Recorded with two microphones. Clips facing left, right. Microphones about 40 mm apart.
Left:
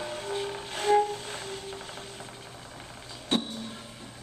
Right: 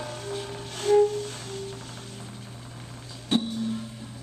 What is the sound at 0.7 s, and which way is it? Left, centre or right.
Music, left.